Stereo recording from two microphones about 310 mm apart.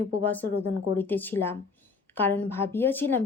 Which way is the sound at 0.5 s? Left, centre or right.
Right.